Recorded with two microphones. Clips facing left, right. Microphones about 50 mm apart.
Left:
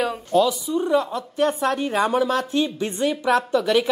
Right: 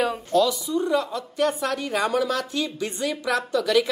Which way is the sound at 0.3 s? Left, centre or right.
Centre.